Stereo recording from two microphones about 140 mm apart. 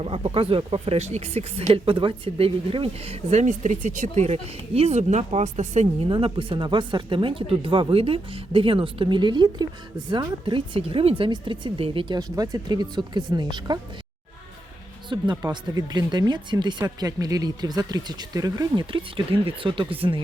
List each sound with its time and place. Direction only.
0.0 s speech: 40° right (ahead or behind)
15.1 s speech: 30° right (ahead or behind)